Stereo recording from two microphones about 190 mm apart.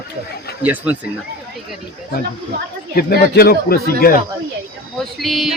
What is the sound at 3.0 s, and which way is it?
Speech, 55° left (ahead or behind).